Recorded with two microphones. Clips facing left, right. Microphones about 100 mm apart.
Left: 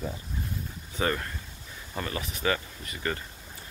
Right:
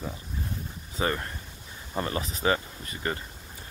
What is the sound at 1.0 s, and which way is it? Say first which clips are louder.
Speech: even; 25° right (ahead or behind).